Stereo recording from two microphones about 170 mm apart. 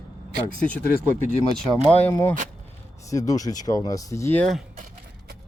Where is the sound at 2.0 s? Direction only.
15° left (ahead or behind).